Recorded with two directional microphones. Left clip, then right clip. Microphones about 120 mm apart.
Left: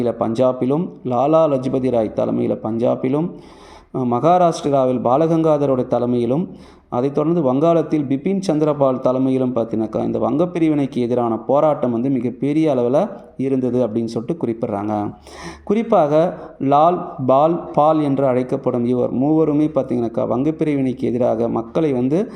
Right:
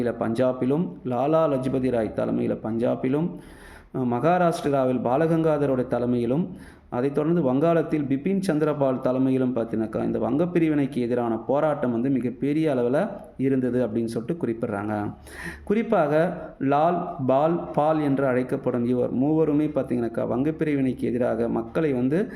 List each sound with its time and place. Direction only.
0.0 s a man's voice: 25° left (ahead or behind)